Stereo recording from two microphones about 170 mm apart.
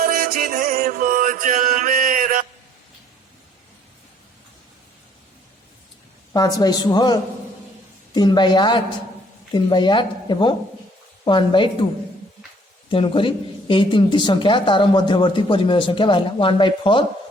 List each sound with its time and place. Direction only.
0.0 s music: 60° right (ahead or behind)
6.3 s speech: 25° left (ahead or behind)
12.9 s speech: 30° left (ahead or behind)